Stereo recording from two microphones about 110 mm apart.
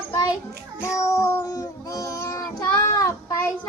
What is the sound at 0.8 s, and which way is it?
Child singing, 25° left (ahead or behind).